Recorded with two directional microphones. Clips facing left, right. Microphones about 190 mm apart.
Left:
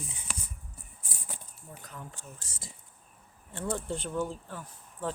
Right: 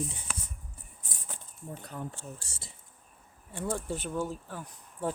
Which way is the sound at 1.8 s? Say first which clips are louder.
Right 5 dB; 35° right (ahead or behind).